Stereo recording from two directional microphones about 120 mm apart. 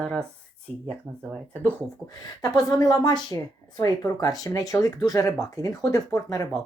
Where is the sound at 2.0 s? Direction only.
15° left (ahead or behind).